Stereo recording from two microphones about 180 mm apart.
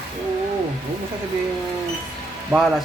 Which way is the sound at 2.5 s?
15° right (ahead or behind).